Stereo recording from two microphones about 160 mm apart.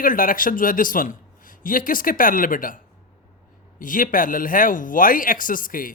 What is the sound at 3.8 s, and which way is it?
Speech, 60° left (ahead or behind).